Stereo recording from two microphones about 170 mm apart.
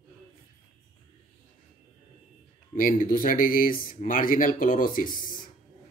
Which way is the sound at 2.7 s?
50° left (ahead or behind).